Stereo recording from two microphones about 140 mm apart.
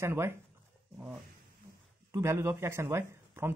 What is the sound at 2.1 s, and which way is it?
Speech, 20° right (ahead or behind).